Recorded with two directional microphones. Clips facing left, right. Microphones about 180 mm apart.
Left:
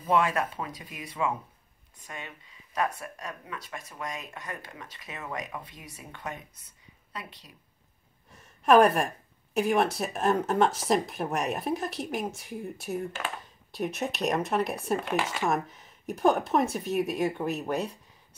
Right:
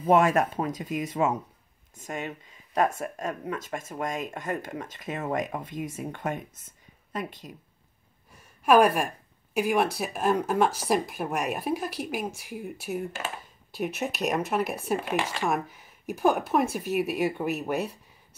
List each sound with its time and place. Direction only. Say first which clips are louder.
0.1 s speech: right 5 dB; 45° right (ahead or behind)
8.4 s a woman's voice: even; centre (ahead or behind)